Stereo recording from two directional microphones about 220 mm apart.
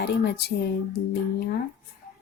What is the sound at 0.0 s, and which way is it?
Speech, 45° left (ahead or behind).